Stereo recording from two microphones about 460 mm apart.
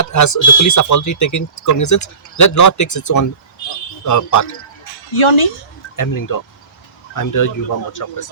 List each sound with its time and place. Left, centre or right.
0.0 s a sound: left
0.6 s speech: left
5.1 s speech: left
6.0 s speech: left